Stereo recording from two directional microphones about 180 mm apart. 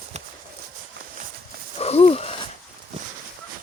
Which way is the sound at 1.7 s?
35° left (ahead or behind).